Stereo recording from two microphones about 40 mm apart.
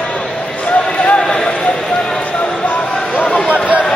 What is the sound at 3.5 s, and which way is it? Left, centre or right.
Chatter, right.